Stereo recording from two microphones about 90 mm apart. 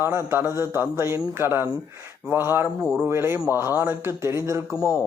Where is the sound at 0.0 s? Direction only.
30° right (ahead or behind).